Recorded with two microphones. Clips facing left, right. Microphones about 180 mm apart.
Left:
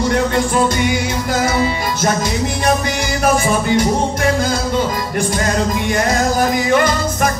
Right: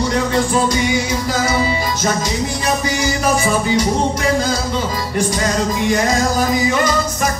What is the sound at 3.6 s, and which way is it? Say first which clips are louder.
Music: left 1 dB; 55° left (ahead or behind).